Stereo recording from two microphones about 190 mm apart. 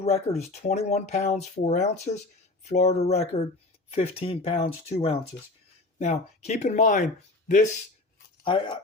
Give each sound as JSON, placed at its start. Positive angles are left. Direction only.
{"t": 0.0, "sound": "speech", "side_deg": 35}
{"t": 8.4, "sound": "speech", "side_deg": 25}